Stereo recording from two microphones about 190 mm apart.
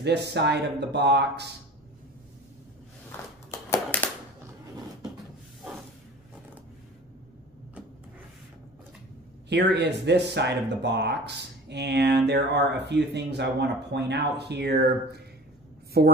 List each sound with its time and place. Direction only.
0.3 s speech: 65° right (ahead or behind)
3.1 s a sound: 10° left (ahead or behind)
9.5 s speech: 65° right (ahead or behind)